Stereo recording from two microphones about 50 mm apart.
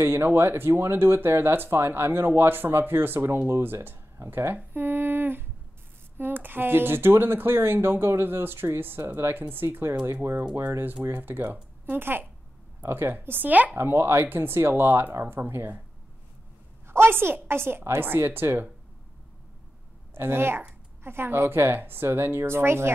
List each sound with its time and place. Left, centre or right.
0.0 s speech: right
11.1 s a woman's voice: right
12.8 s a woman's voice: right
13.1 s a woman's voice: right
13.7 s speech: right
16.8 s speech: right
20.2 s speech: right
21.7 s speech: right